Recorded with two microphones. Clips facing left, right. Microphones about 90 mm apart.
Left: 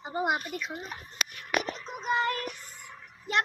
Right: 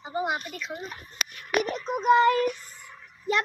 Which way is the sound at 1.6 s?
60° right (ahead or behind).